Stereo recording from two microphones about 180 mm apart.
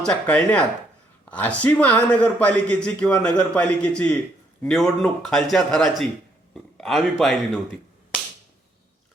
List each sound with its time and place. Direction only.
0.0 s a man's voice: 5° left (ahead or behind)